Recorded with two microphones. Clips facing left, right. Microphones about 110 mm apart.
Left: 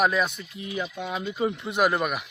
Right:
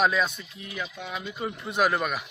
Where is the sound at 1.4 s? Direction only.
15° left (ahead or behind).